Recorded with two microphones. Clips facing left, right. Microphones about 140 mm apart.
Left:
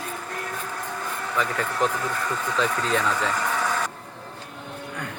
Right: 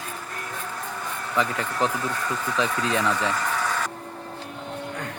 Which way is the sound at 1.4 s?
20° right (ahead or behind).